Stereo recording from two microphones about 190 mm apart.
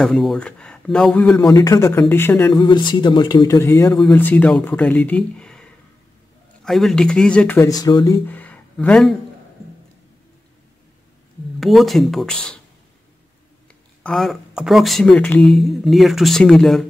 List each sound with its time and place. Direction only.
0.0 s speech: centre (ahead or behind)
1.5 s speech: 20° left (ahead or behind)
2.6 s a man's voice: 25° left (ahead or behind); by 9.1 s 5° left (ahead or behind)
11.6 s speech: centre (ahead or behind)
14.0 s speech: centre (ahead or behind)